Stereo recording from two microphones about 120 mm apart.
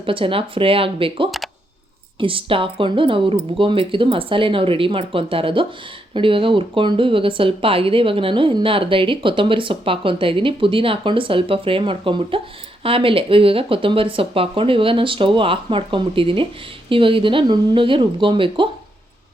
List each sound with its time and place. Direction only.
0.0 s speech: 50° right (ahead or behind)